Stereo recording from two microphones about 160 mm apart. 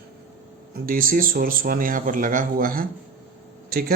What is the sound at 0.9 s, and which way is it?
Speech, 60° right (ahead or behind).